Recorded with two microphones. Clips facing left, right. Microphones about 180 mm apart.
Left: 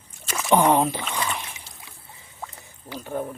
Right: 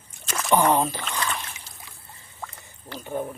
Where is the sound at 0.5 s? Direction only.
15° left (ahead or behind).